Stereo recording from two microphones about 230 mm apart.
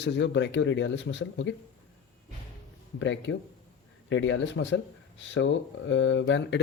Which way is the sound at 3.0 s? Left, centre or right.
Left.